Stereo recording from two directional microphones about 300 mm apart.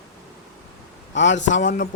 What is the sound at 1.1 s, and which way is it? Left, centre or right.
Speech, left.